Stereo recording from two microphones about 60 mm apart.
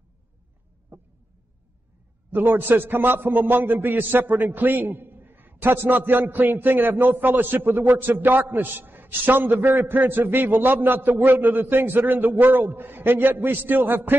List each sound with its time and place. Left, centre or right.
2.3 s a man's voice: right